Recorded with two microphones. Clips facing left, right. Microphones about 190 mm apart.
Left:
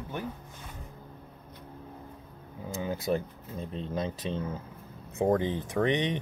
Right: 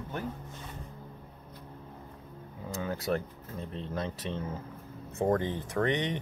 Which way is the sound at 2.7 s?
15° left (ahead or behind).